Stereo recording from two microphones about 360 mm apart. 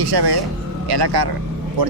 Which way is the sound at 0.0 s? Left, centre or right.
Right.